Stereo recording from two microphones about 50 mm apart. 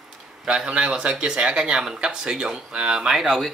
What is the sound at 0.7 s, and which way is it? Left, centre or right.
Speech, centre.